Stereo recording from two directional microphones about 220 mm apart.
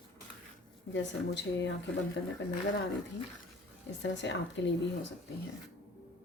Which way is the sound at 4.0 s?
55° left (ahead or behind).